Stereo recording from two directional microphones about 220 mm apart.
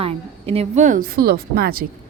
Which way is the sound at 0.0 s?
25° right (ahead or behind).